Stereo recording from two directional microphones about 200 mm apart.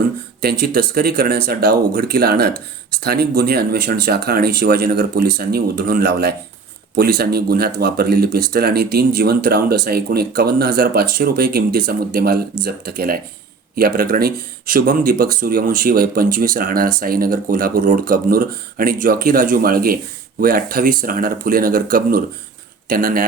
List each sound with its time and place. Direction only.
0.4 s speech: 50° right (ahead or behind)